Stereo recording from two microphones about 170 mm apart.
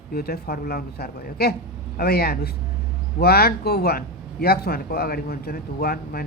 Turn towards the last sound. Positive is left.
turn(degrees=65)  # may be behind; listen again after turning